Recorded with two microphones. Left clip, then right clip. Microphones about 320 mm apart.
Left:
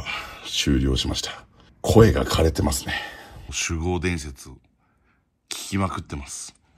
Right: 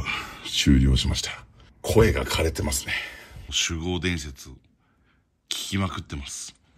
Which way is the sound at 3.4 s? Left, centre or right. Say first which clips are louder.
Right 1 dB; centre.